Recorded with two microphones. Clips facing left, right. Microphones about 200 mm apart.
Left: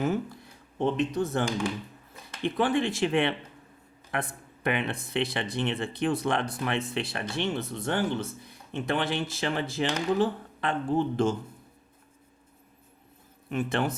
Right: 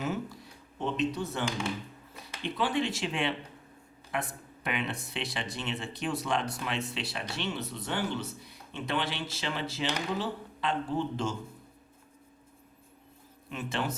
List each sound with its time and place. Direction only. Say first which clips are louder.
0.0 s speech: left 5 dB; 55° left (ahead or behind)
13.5 s speech: left 6 dB; 55° left (ahead or behind)